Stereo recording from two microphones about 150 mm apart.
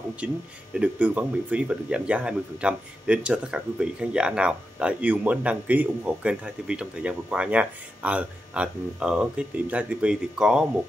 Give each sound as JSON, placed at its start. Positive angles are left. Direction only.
{"t": 0.2, "sound": "speech", "side_deg": -10}